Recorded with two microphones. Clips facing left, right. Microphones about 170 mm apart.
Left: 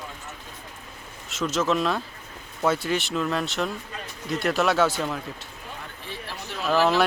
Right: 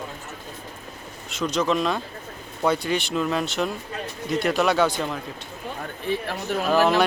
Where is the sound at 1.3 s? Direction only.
Centre (ahead or behind).